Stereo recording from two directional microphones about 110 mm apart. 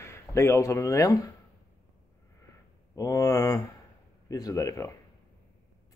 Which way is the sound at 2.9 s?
35° left (ahead or behind).